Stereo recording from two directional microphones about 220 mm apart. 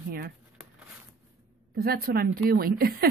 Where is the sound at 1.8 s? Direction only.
45° right (ahead or behind).